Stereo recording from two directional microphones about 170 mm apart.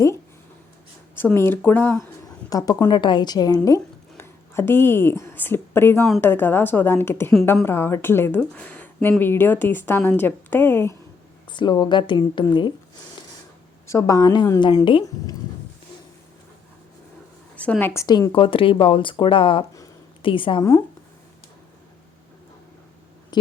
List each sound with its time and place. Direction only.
1.1 s a woman's voice: 15° left (ahead or behind)
11.5 s a woman's voice: 25° left (ahead or behind)
13.8 s a woman's voice: 20° left (ahead or behind)
14.8 s speech: 30° left (ahead or behind)
17.6 s a woman's voice: 10° left (ahead or behind); by 20.7 s 30° left (ahead or behind)
23.3 s a sound: 25° left (ahead or behind)